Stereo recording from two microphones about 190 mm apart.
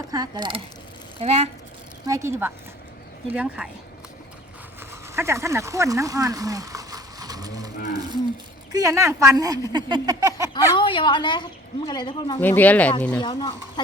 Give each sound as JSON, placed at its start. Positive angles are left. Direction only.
{"t": 0.1, "sound": "speech", "side_deg": -20}
{"t": 2.0, "sound": "speech", "side_deg": -15}
{"t": 4.8, "sound": "a sound", "side_deg": -15}
{"t": 8.7, "sound": "speech", "side_deg": -20}
{"t": 10.5, "sound": "a woman's voice", "side_deg": 25}
{"t": 12.4, "sound": "speech", "side_deg": 10}
{"t": 13.2, "sound": "speech", "side_deg": 25}